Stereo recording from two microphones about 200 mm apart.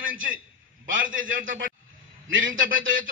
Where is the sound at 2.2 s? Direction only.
75° right (ahead or behind).